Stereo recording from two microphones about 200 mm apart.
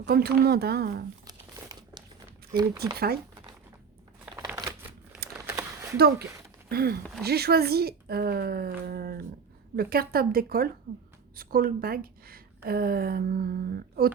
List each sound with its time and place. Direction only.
0.0 s speech: 50° right (ahead or behind)
1.3 s crumpling: 20° right (ahead or behind)
4.4 s a sound: 15° right (ahead or behind)
6.0 s speech: 50° right (ahead or behind)